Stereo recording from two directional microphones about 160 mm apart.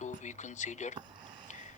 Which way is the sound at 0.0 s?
50° left (ahead or behind).